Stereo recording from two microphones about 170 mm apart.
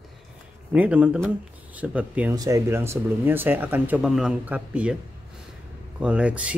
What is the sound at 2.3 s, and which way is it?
Speech, 20° right (ahead or behind).